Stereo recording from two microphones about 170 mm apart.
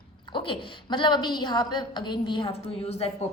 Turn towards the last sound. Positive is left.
turn(degrees=35)  # may be behind; listen again after turning